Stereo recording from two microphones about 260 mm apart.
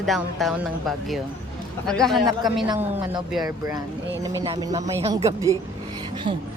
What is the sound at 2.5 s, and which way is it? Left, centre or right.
Speech, centre.